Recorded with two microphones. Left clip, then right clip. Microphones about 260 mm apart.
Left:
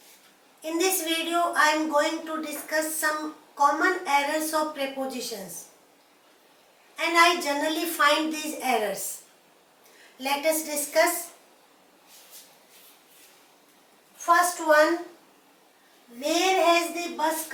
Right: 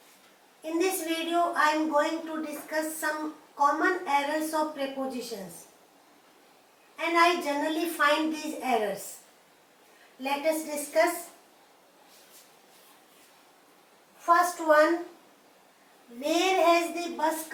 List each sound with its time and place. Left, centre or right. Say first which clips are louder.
0.6 s a woman's voice: left 2 dB; centre
6.9 s a woman's voice: left 3 dB; centre
10.2 s a woman's voice: left 3 dB; centre
14.3 s a woman's voice: left 2 dB; centre
16.2 s a woman's voice: left 2 dB; centre